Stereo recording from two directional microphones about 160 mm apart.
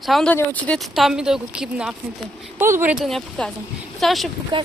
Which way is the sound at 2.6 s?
15° right (ahead or behind).